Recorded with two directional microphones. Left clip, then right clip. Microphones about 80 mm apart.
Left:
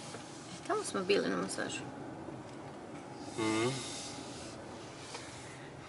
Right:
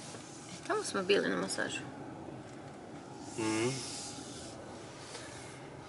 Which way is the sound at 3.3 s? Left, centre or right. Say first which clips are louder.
Left 1 dB; centre.